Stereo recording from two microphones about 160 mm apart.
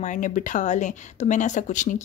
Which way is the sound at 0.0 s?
50° left (ahead or behind).